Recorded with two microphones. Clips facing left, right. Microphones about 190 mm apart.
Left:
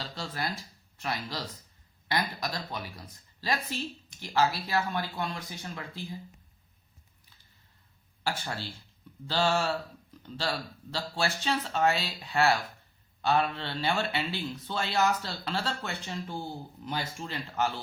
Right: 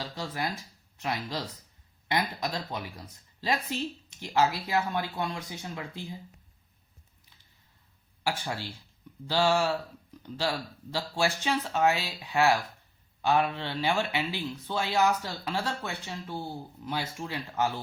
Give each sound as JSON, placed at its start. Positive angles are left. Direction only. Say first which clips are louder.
{"t": 0.0, "sound": "speech", "louder": "right 2 dB", "side_deg": -15}
{"t": 8.2, "sound": "speech", "louder": "right 2 dB", "side_deg": -10}